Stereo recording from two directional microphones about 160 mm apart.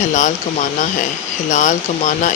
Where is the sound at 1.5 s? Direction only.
50° left (ahead or behind).